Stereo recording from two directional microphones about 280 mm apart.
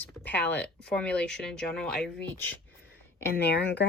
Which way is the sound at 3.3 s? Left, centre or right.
Left.